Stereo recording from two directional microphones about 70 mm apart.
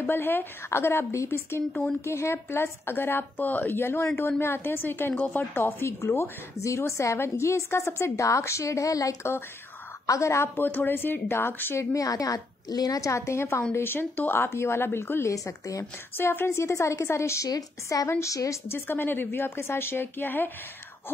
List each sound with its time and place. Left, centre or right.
0.0 s speech: left
1.7 s speech: centre
2.0 s speech: left
11.9 s a woman's voice: left
13.1 s a woman's voice: left
15.3 s a woman's voice: left
15.8 s a woman's voice: left
18.7 s speech: left